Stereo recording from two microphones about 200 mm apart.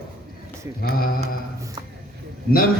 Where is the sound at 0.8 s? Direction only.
45° left (ahead or behind).